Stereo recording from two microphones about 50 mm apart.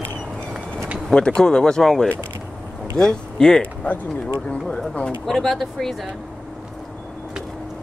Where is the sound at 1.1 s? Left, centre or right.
Centre.